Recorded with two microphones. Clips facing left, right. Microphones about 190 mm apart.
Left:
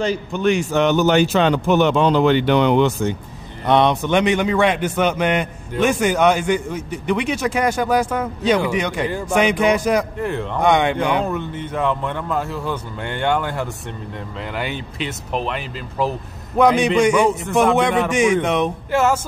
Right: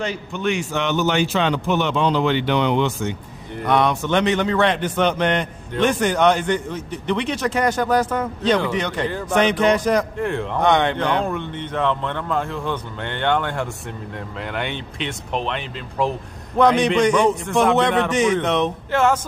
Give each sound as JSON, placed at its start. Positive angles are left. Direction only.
{"t": 0.0, "sound": "a man's voice", "side_deg": 40}
{"t": 3.6, "sound": "a man's voice", "side_deg": 25}